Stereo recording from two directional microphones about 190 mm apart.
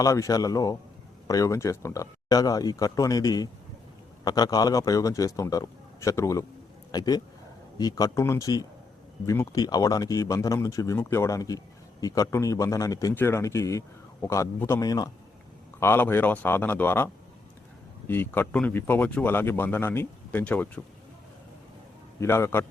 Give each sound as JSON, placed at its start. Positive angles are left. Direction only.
{"t": 0.0, "sound": "speech", "side_deg": 15}
{"t": 18.1, "sound": "speech", "side_deg": 10}
{"t": 22.2, "sound": "speech", "side_deg": 15}